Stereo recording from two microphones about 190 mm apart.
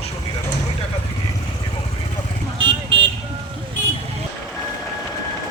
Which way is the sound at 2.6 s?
25° right (ahead or behind).